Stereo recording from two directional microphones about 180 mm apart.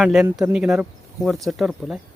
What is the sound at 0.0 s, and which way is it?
Speech, centre (ahead or behind).